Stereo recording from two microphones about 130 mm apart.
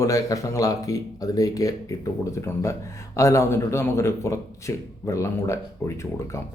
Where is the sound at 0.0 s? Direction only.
25° left (ahead or behind).